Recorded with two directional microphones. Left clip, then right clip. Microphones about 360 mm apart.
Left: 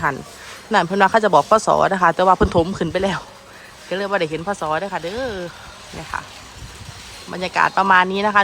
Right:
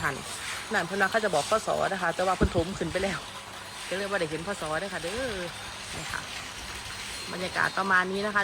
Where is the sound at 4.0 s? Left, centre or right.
Centre.